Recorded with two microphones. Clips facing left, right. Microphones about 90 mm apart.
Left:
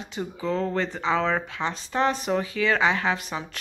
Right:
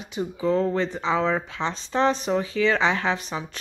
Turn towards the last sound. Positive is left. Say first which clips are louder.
# right 1 dB
turn(degrees=-25)  # may be behind; listen again after turning